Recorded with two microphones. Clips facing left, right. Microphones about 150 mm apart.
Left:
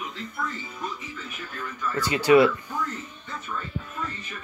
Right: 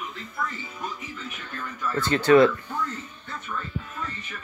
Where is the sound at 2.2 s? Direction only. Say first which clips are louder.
Right 1 dB; 10° left (ahead or behind).